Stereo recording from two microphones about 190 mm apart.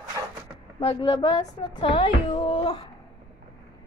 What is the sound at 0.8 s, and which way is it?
Speech, 25° left (ahead or behind).